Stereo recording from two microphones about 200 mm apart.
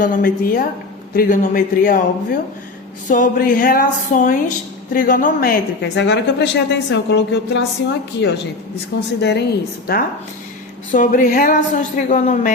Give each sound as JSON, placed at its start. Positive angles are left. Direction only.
{"t": 0.0, "sound": "a man's voice", "side_deg": 45}
{"t": 10.9, "sound": "a woman's voice", "side_deg": 40}